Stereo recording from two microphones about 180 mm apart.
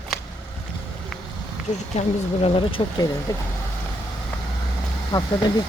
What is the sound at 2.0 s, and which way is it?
Speech, 40° left (ahead or behind).